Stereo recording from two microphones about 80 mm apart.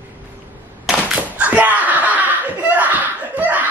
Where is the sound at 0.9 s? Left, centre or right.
Centre.